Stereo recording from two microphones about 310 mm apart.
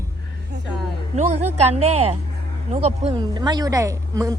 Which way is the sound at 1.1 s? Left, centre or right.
Right.